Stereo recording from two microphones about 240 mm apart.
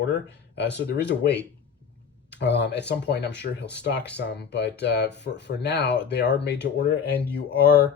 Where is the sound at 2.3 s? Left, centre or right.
Left.